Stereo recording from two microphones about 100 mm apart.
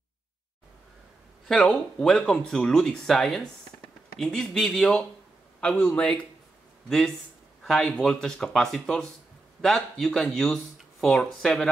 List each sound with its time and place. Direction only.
1.5 s speech: 10° left (ahead or behind)
7.6 s speech: 5° left (ahead or behind)